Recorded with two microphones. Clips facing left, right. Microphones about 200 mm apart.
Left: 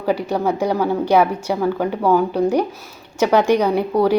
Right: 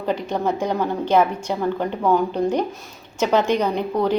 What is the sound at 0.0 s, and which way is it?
A woman's voice, 10° left (ahead or behind).